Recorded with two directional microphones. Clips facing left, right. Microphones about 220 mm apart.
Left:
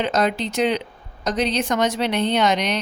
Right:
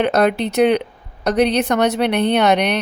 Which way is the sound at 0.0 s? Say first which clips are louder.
Right 5 dB; 60° right (ahead or behind).